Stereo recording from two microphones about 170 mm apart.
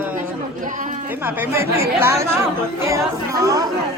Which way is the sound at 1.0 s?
10° right (ahead or behind).